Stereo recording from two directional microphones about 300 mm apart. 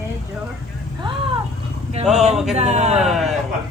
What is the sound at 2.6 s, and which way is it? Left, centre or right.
Speech, right.